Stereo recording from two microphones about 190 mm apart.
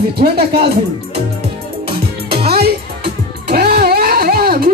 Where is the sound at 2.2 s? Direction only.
55° right (ahead or behind).